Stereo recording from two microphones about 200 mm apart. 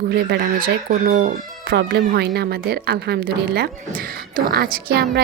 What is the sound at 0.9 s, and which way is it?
Speech, 40° right (ahead or behind).